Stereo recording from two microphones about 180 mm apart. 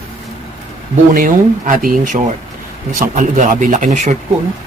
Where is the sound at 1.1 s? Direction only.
50° right (ahead or behind).